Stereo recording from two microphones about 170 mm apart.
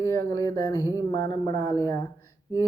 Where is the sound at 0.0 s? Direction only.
20° left (ahead or behind).